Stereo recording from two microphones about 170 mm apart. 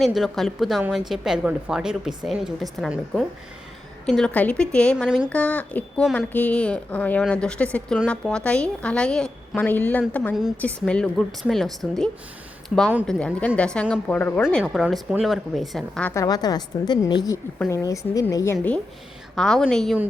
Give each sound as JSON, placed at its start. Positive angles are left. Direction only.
{"t": 0.0, "sound": "a woman's voice", "side_deg": 0}
{"t": 5.0, "sound": "a woman's voice", "side_deg": -5}
{"t": 5.3, "sound": "a woman's voice", "side_deg": 10}
{"t": 16.1, "sound": "a woman's voice", "side_deg": 20}
{"t": 19.4, "sound": "a woman's voice", "side_deg": 5}